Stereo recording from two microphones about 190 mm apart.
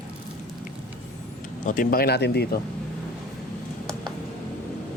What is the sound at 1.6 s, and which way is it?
Speech, 50° left (ahead or behind).